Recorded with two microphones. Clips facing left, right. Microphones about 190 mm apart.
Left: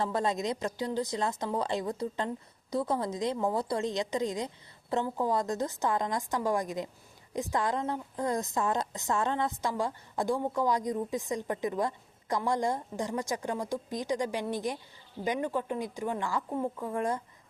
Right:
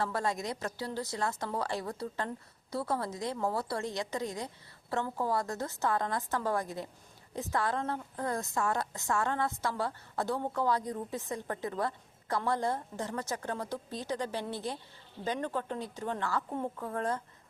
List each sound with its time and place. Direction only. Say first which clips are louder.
0.0 s a woman's voice: left 3 dB; 20° left (ahead or behind)